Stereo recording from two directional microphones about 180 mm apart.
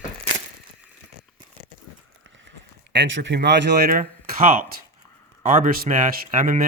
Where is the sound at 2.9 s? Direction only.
90° right; by 3.9 s 75° right (ahead or behind).